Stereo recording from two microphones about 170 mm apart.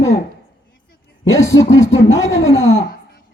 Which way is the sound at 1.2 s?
20° left (ahead or behind).